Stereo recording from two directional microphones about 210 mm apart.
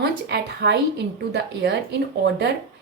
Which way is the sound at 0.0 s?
55° right (ahead or behind).